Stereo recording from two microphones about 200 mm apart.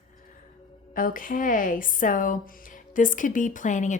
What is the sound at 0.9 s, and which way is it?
A woman's voice, 45° left (ahead or behind).